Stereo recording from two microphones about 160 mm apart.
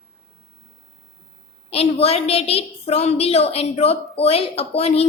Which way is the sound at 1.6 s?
40° left (ahead or behind).